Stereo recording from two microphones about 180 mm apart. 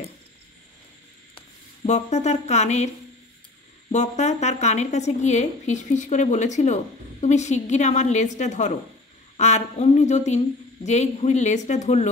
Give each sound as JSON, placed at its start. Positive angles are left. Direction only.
{"t": 1.9, "sound": "a woman's voice", "side_deg": 40}
{"t": 3.9, "sound": "a woman's voice", "side_deg": 40}